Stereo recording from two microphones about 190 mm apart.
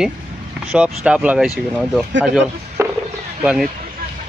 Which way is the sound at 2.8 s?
15° right (ahead or behind).